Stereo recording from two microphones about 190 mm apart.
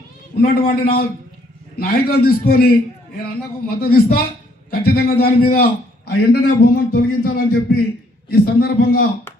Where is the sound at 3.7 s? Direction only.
55° left (ahead or behind).